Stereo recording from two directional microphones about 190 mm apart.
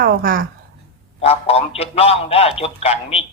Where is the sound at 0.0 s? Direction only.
50° right (ahead or behind).